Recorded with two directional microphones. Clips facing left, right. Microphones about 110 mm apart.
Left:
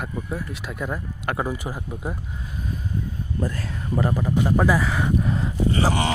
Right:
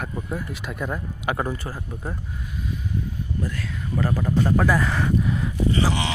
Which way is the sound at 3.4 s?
40° left (ahead or behind).